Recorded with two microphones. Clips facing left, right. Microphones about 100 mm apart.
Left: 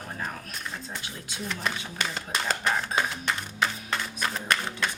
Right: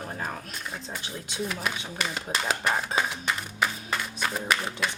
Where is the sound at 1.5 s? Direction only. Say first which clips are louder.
Even; 5° right (ahead or behind).